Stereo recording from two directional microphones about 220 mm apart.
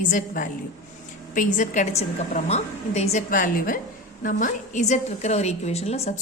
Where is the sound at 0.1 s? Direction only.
35° left (ahead or behind).